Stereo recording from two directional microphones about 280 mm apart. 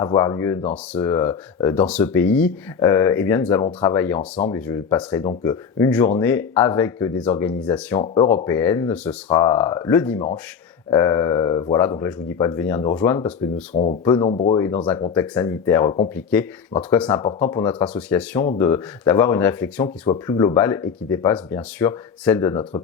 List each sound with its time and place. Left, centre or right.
0.0 s speech: centre
14.6 s speech: centre